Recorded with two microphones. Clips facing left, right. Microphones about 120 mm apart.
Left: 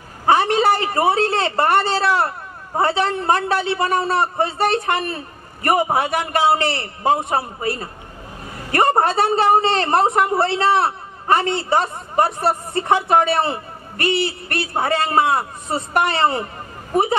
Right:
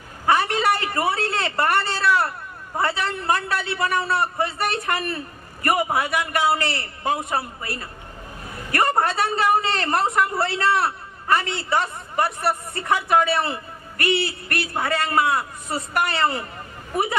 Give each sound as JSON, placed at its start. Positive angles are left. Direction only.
{"t": 0.3, "sound": "a man's voice", "side_deg": 25}